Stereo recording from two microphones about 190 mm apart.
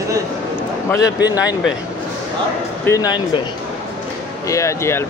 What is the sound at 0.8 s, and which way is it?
Speech, 15° left (ahead or behind).